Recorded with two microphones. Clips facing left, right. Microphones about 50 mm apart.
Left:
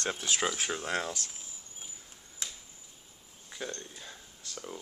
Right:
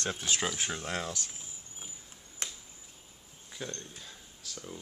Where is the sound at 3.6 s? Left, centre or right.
Centre.